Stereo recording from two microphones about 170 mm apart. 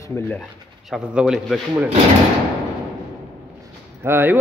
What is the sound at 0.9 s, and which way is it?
Speech, 5° right (ahead or behind).